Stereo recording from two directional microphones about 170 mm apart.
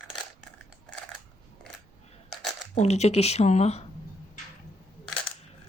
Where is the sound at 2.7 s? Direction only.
40° left (ahead or behind).